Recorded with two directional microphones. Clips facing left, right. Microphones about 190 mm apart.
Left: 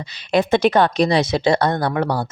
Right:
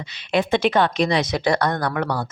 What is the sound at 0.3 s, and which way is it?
A woman's voice, 40° left (ahead or behind).